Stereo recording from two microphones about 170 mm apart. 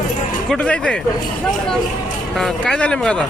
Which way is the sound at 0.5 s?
5° left (ahead or behind).